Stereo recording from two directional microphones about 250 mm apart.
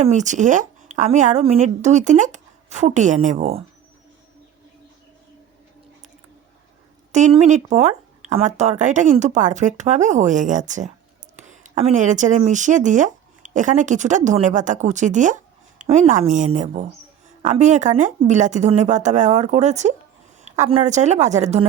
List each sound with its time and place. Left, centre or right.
0.0 s a woman's voice: right
7.1 s a woman's voice: right